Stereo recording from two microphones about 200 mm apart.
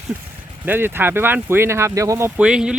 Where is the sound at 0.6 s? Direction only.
10° right (ahead or behind).